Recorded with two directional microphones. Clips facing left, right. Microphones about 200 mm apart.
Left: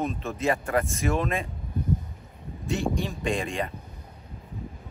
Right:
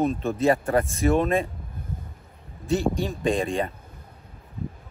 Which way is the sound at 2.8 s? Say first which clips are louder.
Right 3 dB; centre (ahead or behind).